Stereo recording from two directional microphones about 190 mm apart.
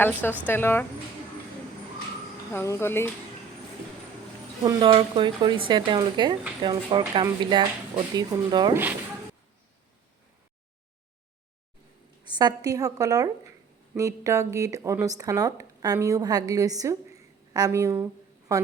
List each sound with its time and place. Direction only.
0.0 s speech: 10° left (ahead or behind)
2.5 s speech: 15° left (ahead or behind)
4.6 s speech: 25° right (ahead or behind)
12.3 s speech: 20° right (ahead or behind)